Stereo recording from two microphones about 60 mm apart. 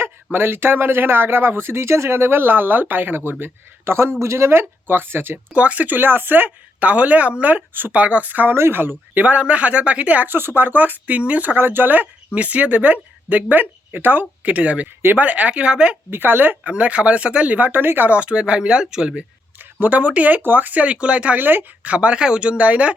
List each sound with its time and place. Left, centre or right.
0.3 s speech: right
5.5 s speech: right
8.5 s speech: right
9.2 s speech: right
10.2 s speech: right; by 16.0 s centre
16.0 s speech: right
17.7 s speech: right; by 19.2 s centre
19.5 s speech: right
21.3 s speech: right